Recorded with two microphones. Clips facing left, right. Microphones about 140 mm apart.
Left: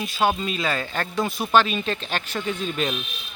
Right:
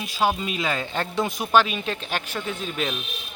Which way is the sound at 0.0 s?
10° right (ahead or behind).